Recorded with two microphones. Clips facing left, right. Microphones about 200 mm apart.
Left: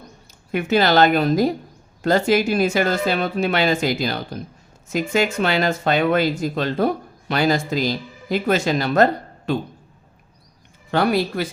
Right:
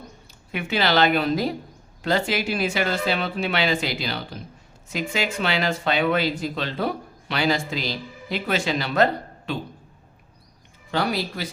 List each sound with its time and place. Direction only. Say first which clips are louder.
0.5 s speech: left 5 dB; 45° left (ahead or behind)
10.9 s speech: left 6 dB; 55° left (ahead or behind)